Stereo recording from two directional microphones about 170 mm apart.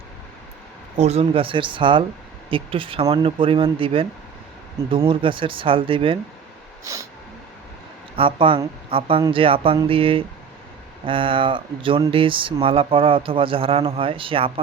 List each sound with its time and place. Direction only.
0.9 s speech: 40° right (ahead or behind)
6.8 s a sound: 20° right (ahead or behind)
8.1 s speech: 30° right (ahead or behind)